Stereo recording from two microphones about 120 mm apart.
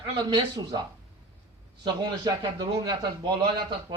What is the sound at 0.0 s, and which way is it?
Speech, 35° right (ahead or behind).